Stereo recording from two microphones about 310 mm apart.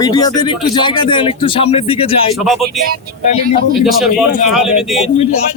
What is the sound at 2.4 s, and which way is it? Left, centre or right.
Speech, centre.